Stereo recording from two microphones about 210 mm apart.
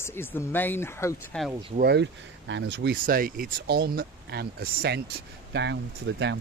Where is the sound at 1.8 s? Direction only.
55° right (ahead or behind).